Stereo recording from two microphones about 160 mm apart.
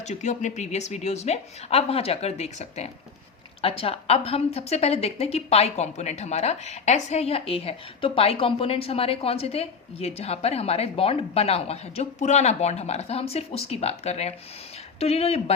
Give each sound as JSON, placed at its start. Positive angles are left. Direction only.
{"t": 0.1, "sound": "a woman's voice", "side_deg": 50}